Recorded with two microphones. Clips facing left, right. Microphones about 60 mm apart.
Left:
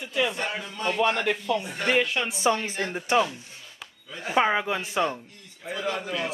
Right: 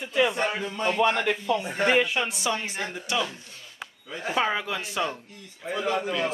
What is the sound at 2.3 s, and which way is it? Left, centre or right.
Speech, left.